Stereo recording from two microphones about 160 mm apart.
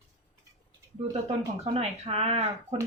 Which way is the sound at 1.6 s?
40° right (ahead or behind).